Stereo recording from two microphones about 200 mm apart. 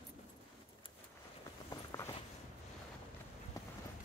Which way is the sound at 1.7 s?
15° left (ahead or behind).